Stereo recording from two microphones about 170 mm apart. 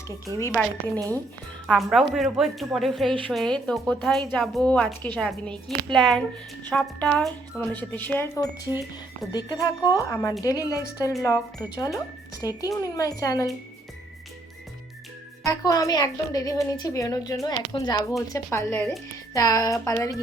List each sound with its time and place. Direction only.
0.3 s speech: 10° left (ahead or behind)
1.6 s a woman's voice: centre (ahead or behind); by 13.5 s 20° left (ahead or behind)
15.4 s a woman's voice: 20° left (ahead or behind)